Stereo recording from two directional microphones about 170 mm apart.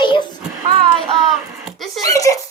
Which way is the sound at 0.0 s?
30° left (ahead or behind).